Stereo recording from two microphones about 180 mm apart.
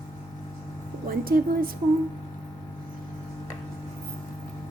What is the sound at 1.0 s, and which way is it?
Speech, 55° right (ahead or behind).